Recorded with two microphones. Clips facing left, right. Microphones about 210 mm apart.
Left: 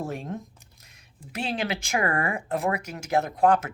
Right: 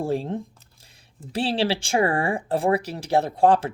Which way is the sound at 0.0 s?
30° right (ahead or behind).